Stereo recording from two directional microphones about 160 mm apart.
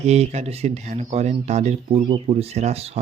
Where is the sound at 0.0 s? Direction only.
45° right (ahead or behind).